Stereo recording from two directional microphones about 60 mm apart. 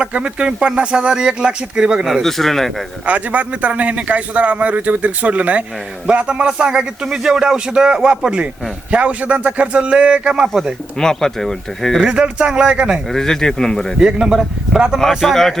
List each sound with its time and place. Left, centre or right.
0.0 s speech: centre
2.2 s a man's voice: centre
3.1 s a man's voice: right
11.0 s speech: centre
11.9 s speech: centre
13.1 s speech: centre
14.0 s speech: centre
14.9 s a man's voice: centre